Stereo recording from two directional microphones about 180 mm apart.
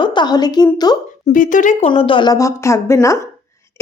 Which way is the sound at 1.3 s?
45° left (ahead or behind).